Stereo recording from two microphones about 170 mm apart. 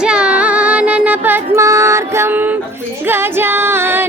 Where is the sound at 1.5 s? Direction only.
15° right (ahead or behind).